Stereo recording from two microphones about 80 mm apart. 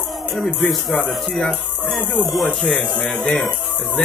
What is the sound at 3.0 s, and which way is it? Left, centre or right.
Music, centre.